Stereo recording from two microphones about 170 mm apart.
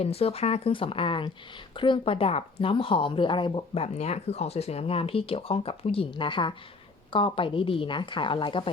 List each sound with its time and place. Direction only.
0.0 s a woman's voice: 35° left (ahead or behind)